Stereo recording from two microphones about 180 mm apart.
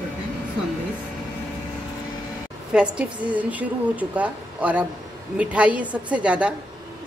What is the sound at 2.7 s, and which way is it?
A woman's voice, 5° right (ahead or behind).